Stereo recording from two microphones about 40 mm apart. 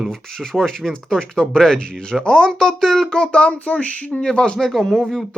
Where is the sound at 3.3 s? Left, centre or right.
Left.